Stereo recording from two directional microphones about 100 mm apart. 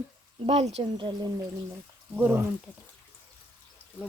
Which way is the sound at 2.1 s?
25° right (ahead or behind).